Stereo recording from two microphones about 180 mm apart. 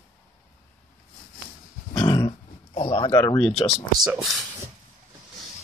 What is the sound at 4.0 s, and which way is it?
Speech, 5° right (ahead or behind).